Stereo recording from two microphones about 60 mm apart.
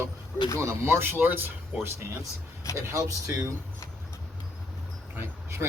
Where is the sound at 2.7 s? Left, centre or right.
Right.